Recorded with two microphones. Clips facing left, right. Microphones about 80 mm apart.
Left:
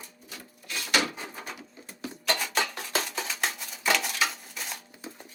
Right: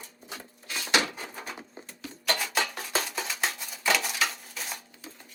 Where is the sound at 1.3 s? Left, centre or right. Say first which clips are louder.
Right 1 dB; centre.